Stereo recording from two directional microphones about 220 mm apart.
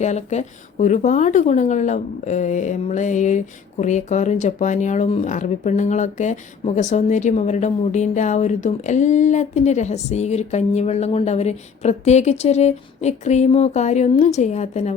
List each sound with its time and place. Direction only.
0.0 s a woman's voice: 30° left (ahead or behind)